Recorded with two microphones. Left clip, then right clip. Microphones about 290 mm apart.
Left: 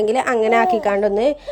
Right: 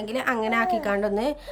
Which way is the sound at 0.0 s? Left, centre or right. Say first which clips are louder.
Left 9 dB; centre.